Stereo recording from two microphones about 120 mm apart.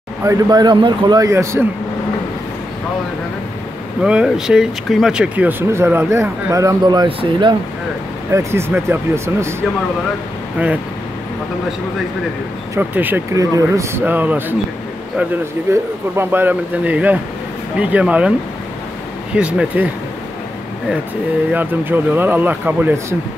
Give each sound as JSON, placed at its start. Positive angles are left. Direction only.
{"t": 0.2, "sound": "a man's voice", "side_deg": -30}
{"t": 4.0, "sound": "speech", "side_deg": -5}
{"t": 7.1, "sound": "speech", "side_deg": -45}
{"t": 8.3, "sound": "speech", "side_deg": -25}
{"t": 12.7, "sound": "speech", "side_deg": -15}
{"t": 13.3, "sound": "speech", "side_deg": -30}
{"t": 14.0, "sound": "speech", "side_deg": -15}
{"t": 15.7, "sound": "speech", "side_deg": -20}
{"t": 19.3, "sound": "speech", "side_deg": -10}
{"t": 21.5, "sound": "speech", "side_deg": -15}